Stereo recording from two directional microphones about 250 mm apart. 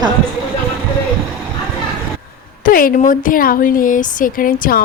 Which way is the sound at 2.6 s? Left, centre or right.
Left.